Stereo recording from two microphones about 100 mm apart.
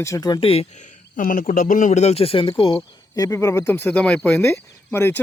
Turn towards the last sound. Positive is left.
turn(degrees=20)  # may be behind; listen again after turning